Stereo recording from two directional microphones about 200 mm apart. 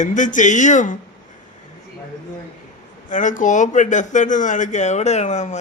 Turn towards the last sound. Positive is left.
turn(degrees=35)  # may be behind; listen again after turning